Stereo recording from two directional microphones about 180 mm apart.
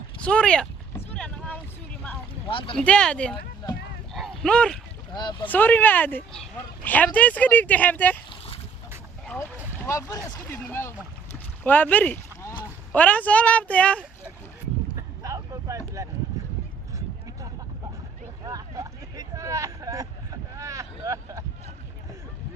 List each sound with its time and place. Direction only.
0.2 s boat: 5° left (ahead or behind)
2.5 s speech: 30° left (ahead or behind)
2.7 s speech: 5° left (ahead or behind)
4.1 s a sound: 5° left (ahead or behind)
5.1 s speech: 25° left (ahead or behind)
5.5 s speech: 10° left (ahead or behind)
9.8 s speech: 15° left (ahead or behind)
15.2 s vehicle: 20° right (ahead or behind)
18.4 s vehicle: 20° right (ahead or behind)